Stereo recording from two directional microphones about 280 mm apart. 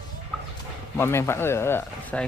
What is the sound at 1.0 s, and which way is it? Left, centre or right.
Speech, centre.